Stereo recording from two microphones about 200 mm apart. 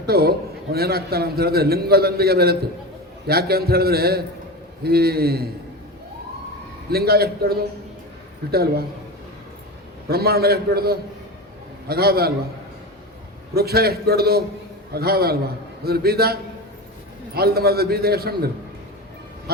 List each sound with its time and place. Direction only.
0.0 s a man's voice: 50° right (ahead or behind)
6.9 s a man's voice: 50° right (ahead or behind)
10.1 s a man's voice: 50° right (ahead or behind)
13.5 s a man's voice: 50° right (ahead or behind)